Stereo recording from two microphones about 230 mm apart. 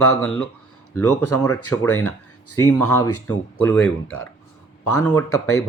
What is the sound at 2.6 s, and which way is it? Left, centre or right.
Speech, centre.